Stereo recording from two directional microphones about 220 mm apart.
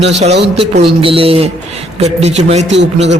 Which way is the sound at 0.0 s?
30° right (ahead or behind).